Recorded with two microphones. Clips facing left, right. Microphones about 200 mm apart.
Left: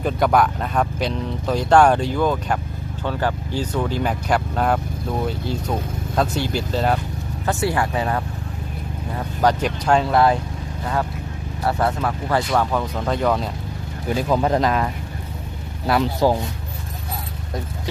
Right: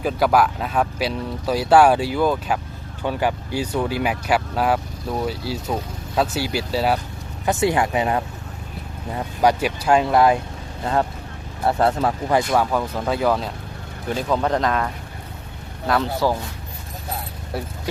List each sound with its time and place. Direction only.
0.0 s speech: 5° right (ahead or behind)
7.4 s speech: 20° right (ahead or behind)
11.6 s speech: 30° right (ahead or behind)
12.5 s speech: 10° right (ahead or behind)
14.1 s speech: 10° left (ahead or behind)
16.2 s speech: 20° left (ahead or behind)